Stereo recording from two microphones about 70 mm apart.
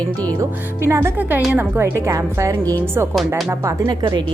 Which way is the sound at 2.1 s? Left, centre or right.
Right.